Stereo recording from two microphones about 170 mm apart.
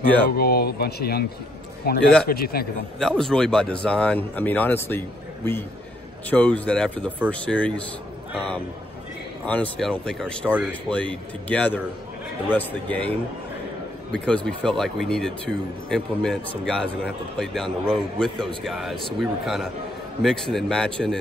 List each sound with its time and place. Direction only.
0.4 s a man's voice: 65° left (ahead or behind)
3.0 s a man's voice: centre (ahead or behind)
14.1 s a man's voice: 5° left (ahead or behind)